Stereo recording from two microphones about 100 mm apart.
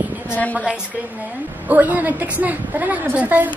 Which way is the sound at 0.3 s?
15° left (ahead or behind).